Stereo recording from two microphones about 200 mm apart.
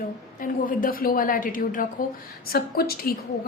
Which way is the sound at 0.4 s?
45° left (ahead or behind).